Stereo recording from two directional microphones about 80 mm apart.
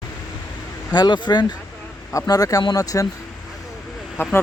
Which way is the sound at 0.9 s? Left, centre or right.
Left.